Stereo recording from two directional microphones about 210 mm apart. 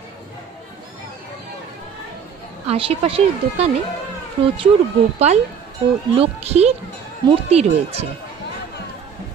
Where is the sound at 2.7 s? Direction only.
25° right (ahead or behind).